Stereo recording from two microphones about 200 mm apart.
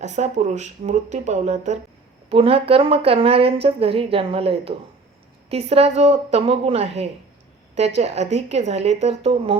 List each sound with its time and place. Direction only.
0.0 s a woman's voice: 35° right (ahead or behind)